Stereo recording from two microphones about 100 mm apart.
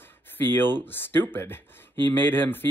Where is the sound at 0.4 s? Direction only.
20° left (ahead or behind).